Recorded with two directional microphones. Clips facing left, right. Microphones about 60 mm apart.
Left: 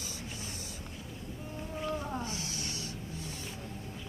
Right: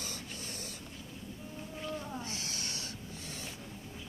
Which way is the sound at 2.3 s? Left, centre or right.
Right.